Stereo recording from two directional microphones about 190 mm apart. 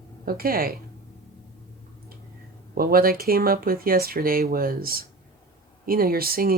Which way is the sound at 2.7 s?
50° right (ahead or behind).